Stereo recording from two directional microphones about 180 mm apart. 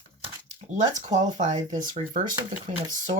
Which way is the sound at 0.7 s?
40° right (ahead or behind).